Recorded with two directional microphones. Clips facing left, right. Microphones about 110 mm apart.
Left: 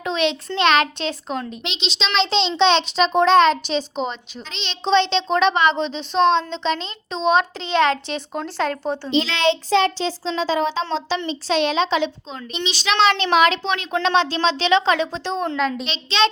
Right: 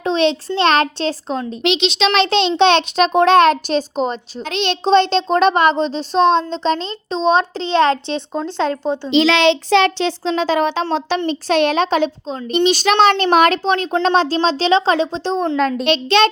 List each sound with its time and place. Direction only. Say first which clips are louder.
0.0 s a child's voice: right 5 dB; 35° right (ahead or behind)
1.6 s a child's voice: right 11 dB; 70° right (ahead or behind); by 4.2 s 40° right (ahead or behind)
4.4 s a child's voice: right 7 dB; 55° right (ahead or behind); by 9.0 s 20° right (ahead or behind)
9.0 s a child's voice: right 6 dB; 90° right; by 15.7 s 35° right (ahead or behind)
15.8 s speech: right 7 dB; 55° right (ahead or behind)